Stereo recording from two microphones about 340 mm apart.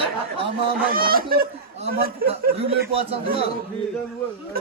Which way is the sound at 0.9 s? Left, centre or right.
Right.